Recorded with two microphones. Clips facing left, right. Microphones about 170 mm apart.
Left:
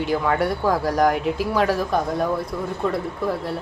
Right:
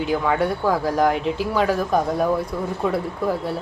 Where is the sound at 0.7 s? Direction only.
10° left (ahead or behind).